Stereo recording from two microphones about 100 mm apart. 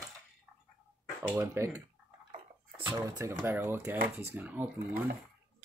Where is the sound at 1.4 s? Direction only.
30° right (ahead or behind).